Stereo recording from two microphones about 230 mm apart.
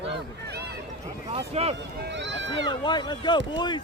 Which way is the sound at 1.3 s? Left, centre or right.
Right.